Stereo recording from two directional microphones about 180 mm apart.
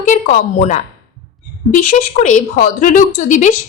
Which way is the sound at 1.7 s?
45° left (ahead or behind).